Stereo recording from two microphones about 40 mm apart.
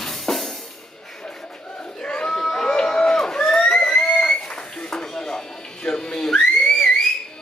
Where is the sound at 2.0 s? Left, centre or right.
Left.